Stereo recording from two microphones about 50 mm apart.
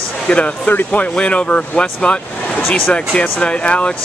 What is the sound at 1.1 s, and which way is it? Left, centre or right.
Speech, left.